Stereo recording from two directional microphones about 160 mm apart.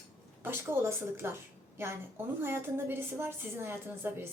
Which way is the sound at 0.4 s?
15° right (ahead or behind).